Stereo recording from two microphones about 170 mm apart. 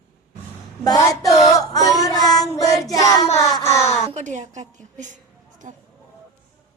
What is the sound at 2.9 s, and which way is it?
Child singing, 20° left (ahead or behind).